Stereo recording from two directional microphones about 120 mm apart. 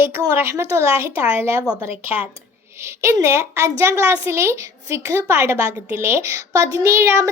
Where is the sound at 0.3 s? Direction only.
20° right (ahead or behind).